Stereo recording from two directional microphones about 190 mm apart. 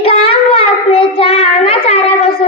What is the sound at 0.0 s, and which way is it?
Child singing, 30° left (ahead or behind).